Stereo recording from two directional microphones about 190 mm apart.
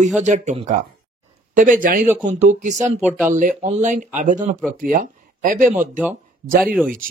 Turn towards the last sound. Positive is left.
turn(degrees=0)  # may be behind; listen again after turning